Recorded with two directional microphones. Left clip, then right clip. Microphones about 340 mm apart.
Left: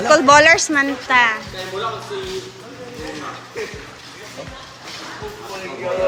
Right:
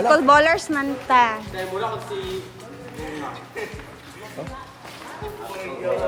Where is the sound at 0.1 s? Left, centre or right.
Centre.